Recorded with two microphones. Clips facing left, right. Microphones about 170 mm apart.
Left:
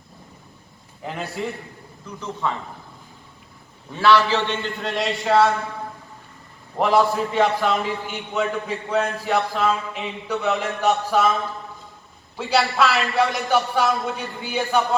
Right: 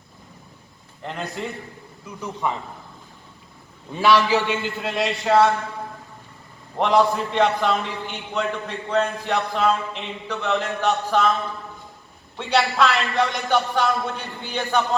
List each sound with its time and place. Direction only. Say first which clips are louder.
1.0 s a man's voice: left 1 dB; centre (ahead or behind)
2.0 s a man's voice: even; 15° right (ahead or behind)
3.9 s a man's voice: even; 15° right (ahead or behind)
4.5 s a man's voice: right 1 dB; 5° right (ahead or behind)
6.7 s a man's voice: even; 5° left (ahead or behind)
12.4 s a man's voice: even; centre (ahead or behind)